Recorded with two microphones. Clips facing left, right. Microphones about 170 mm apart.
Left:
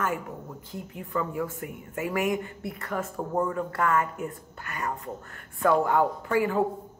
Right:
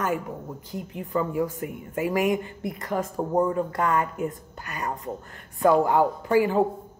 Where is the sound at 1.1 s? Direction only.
25° right (ahead or behind).